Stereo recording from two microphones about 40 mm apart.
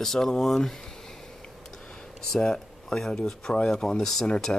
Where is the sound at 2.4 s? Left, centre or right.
Centre.